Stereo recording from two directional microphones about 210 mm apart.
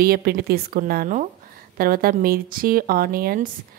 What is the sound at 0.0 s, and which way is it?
Speech, 45° right (ahead or behind).